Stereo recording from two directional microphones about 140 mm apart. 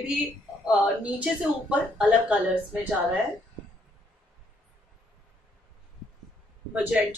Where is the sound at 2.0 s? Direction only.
10° right (ahead or behind).